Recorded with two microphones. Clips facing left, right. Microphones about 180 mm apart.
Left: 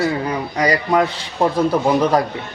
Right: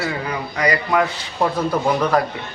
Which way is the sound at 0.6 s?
30° left (ahead or behind).